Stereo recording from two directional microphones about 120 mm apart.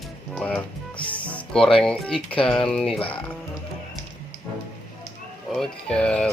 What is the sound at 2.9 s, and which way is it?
Speech, 50° left (ahead or behind).